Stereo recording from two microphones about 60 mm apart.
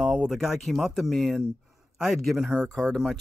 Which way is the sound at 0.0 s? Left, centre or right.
Centre.